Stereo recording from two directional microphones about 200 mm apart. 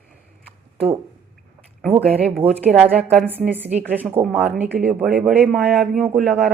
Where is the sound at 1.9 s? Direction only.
10° right (ahead or behind).